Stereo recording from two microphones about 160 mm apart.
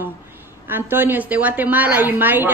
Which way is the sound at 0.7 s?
15° right (ahead or behind).